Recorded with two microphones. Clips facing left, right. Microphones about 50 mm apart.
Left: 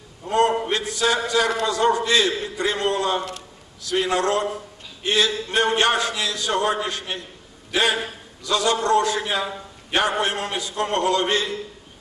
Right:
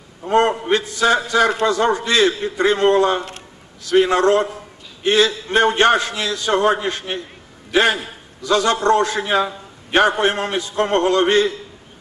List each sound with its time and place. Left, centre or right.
0.3 s a man's voice: right